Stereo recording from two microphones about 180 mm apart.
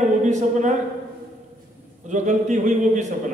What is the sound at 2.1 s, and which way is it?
Speech, 45° right (ahead or behind).